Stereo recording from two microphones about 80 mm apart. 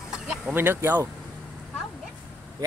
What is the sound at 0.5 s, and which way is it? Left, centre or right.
Speech, right.